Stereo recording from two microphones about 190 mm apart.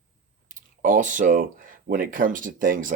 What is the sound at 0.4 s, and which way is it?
Speech, 45° right (ahead or behind).